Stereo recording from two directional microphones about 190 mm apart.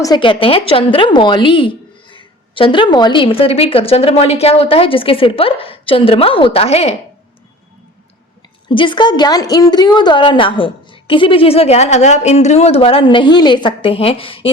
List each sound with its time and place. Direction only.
0.0 s a woman's voice: 25° left (ahead or behind)
8.7 s a woman's voice: 25° left (ahead or behind)